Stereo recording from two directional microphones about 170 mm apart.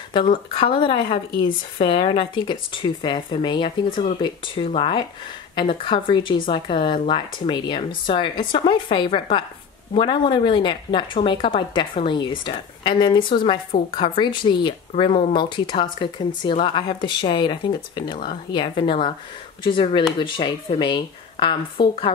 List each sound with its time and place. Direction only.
0.6 s speech: 30° left (ahead or behind)